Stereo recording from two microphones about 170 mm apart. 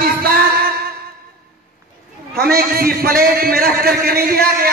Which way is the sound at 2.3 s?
60° right (ahead or behind).